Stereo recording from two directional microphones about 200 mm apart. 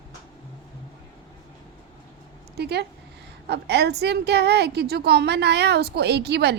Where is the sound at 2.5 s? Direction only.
55° right (ahead or behind).